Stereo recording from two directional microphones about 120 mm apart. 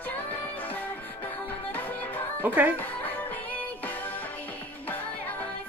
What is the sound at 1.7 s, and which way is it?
Music, 15° left (ahead or behind).